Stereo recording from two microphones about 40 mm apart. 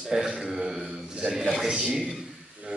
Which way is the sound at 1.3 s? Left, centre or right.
Centre.